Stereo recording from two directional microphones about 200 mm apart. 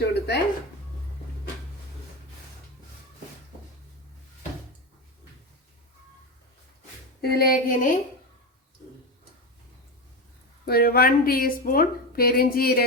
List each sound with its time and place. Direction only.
0.0 s a sound: 55° left (ahead or behind)
7.2 s speech: 50° left (ahead or behind)
10.7 s speech: 50° left (ahead or behind)